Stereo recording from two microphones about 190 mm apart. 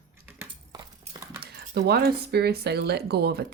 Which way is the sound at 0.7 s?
20° right (ahead or behind).